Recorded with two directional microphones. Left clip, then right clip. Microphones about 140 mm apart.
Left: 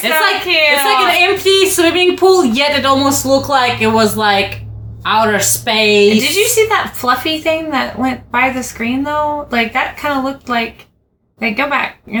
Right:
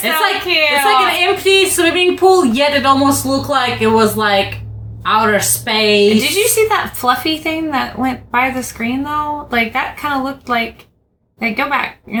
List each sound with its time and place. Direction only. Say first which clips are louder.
0.4 s a sound: left 2 dB; 10° right (ahead or behind)
1.2 s a woman's voice: left 1 dB; 15° left (ahead or behind)
6.1 s a woman's voice: left 1 dB; 20° right (ahead or behind)